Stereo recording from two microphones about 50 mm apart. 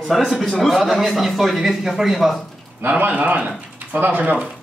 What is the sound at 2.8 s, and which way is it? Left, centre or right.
Speech, right.